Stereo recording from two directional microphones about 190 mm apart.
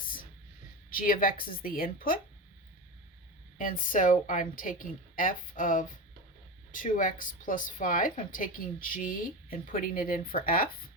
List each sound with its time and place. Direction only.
0.0 s whispering: 50° left (ahead or behind)
0.9 s a woman's voice: 50° left (ahead or behind)
3.6 s a woman's voice: 45° left (ahead or behind)